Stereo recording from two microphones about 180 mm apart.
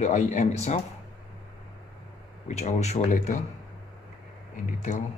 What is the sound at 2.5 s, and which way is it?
Speech, 40° left (ahead or behind).